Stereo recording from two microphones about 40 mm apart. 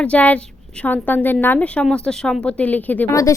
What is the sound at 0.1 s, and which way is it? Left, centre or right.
Speech, left.